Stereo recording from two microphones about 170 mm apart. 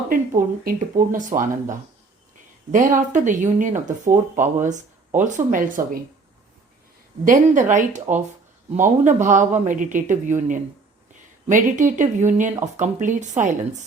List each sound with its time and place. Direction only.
0.1 s speech: 55° right (ahead or behind)
2.7 s speech: 50° right (ahead or behind)
7.3 s speech: 50° right (ahead or behind)